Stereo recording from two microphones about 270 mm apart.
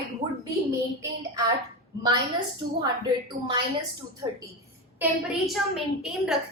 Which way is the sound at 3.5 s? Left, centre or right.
Centre.